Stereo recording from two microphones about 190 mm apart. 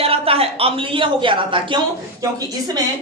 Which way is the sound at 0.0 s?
30° right (ahead or behind).